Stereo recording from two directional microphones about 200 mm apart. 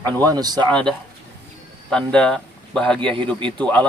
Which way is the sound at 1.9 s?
5° left (ahead or behind).